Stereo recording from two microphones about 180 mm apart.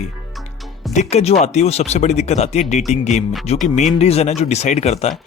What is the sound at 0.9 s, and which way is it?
Speech, 40° left (ahead or behind).